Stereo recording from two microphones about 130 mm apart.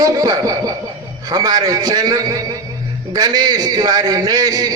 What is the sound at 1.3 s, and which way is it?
A man's voice, 30° right (ahead or behind).